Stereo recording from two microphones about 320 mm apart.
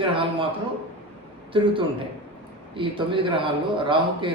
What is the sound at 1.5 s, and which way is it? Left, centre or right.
Speech, centre.